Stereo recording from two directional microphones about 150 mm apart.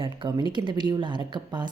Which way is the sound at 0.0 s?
30° right (ahead or behind).